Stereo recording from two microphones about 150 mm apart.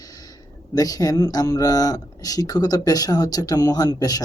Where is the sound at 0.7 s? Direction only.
25° left (ahead or behind).